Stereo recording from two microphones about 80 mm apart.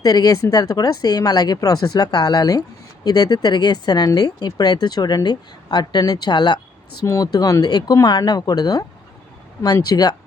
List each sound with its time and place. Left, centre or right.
0.0 s speech: left
7.0 s speech: left